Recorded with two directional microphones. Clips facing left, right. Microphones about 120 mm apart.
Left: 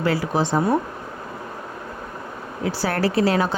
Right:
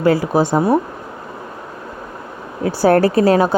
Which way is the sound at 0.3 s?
45° right (ahead or behind).